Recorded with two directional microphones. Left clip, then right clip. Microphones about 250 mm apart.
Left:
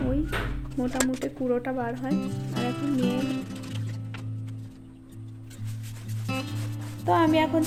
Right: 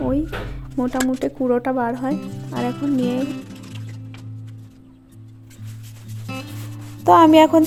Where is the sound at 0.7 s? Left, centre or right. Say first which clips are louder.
Right 6 dB; right.